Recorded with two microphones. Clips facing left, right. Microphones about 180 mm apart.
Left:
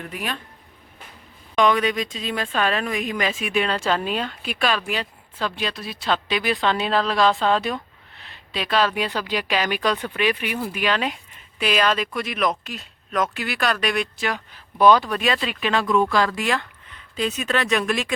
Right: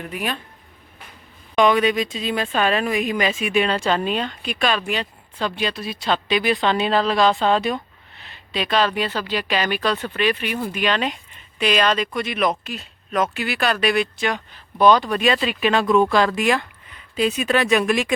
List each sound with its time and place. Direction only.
0.1 s speech: 5° right (ahead or behind)
1.5 s speech: 5° right (ahead or behind)
15.7 s speech: 20° right (ahead or behind)